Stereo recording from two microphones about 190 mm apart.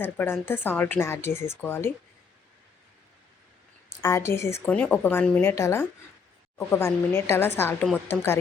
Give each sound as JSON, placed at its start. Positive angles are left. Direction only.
{"t": 0.0, "sound": "speech", "side_deg": 10}
{"t": 4.0, "sound": "speech", "side_deg": 15}